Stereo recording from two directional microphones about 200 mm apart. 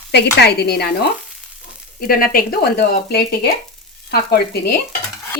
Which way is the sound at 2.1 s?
45° left (ahead or behind).